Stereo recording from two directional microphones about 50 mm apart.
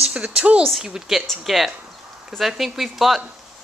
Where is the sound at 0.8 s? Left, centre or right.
Centre.